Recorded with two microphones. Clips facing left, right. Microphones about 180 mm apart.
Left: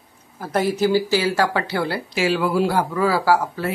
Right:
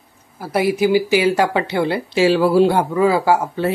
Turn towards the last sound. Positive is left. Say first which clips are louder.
# right 3 dB
turn(degrees=-25)  # may be behind; listen again after turning